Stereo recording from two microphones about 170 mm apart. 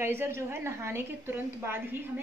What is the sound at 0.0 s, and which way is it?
Speech, 15° right (ahead or behind).